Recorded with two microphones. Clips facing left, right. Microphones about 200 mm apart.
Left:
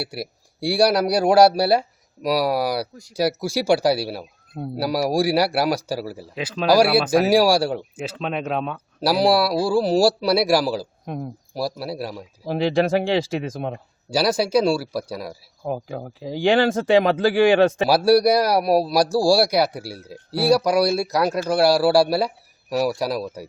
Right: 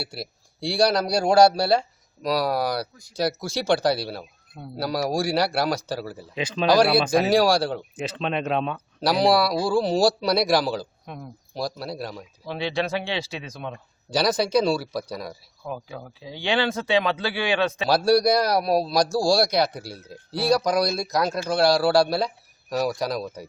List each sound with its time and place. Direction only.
0.0 s a man's voice: 10° left (ahead or behind)
11.0 s speech: 45° left (ahead or behind)
11.5 s a man's voice: 5° left (ahead or behind)
12.5 s speech: 45° left (ahead or behind)
14.1 s a man's voice: 5° left (ahead or behind)
15.6 s speech: 45° left (ahead or behind)
17.8 s a man's voice: 10° left (ahead or behind)